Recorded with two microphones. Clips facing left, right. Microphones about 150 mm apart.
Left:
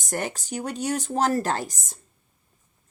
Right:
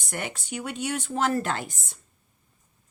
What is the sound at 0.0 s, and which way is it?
Speech, 40° left (ahead or behind).